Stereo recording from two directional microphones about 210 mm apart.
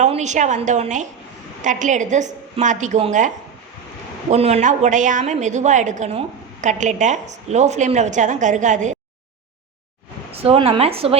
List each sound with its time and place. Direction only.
0.0 s a woman's voice: 35° right (ahead or behind)
10.3 s speech: 25° right (ahead or behind)